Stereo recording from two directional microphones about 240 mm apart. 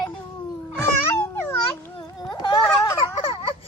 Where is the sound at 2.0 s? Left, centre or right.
Centre.